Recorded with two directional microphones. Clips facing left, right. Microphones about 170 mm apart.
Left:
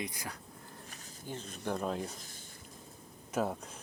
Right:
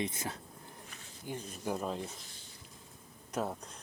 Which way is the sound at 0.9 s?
40° left (ahead or behind).